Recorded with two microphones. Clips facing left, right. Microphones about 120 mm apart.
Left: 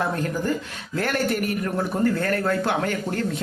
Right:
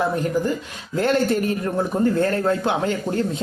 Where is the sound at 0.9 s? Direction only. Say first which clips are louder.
Right 5 dB; 25° right (ahead or behind).